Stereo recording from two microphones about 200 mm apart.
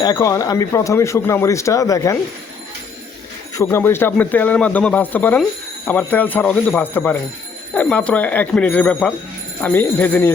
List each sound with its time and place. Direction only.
0.0 s speech: 15° left (ahead or behind)
3.5 s speech: 15° left (ahead or behind)